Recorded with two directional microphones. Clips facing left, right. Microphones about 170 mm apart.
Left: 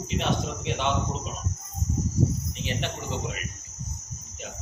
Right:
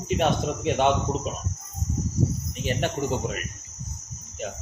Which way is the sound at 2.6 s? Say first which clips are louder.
Right 7 dB; 45° right (ahead or behind).